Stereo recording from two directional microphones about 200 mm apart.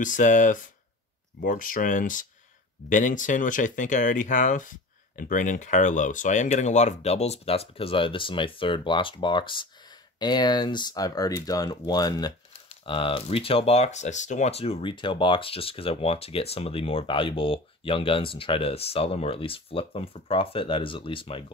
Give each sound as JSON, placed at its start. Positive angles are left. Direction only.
{"t": 0.0, "sound": "speech", "side_deg": 40}